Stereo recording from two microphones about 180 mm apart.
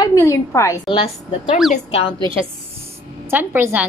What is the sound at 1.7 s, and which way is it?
Speech, 35° left (ahead or behind).